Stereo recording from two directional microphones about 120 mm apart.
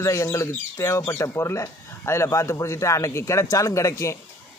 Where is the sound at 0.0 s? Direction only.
25° left (ahead or behind).